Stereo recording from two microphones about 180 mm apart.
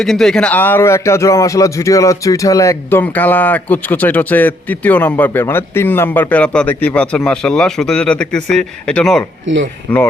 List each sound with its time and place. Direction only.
0.0 s a man's voice: centre (ahead or behind)
9.5 s speech: 90° right
9.9 s a man's voice: 10° left (ahead or behind)